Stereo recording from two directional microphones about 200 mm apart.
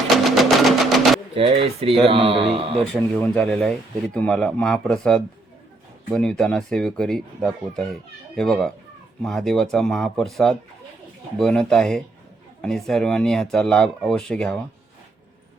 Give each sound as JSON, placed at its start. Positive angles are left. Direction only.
{"t": 0.3, "sound": "music", "side_deg": 0}
{"t": 1.4, "sound": "a man's voice", "side_deg": -30}
{"t": 2.9, "sound": "speech", "side_deg": 5}